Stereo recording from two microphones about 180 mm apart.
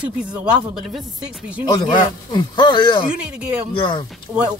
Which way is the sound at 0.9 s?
5° right (ahead or behind).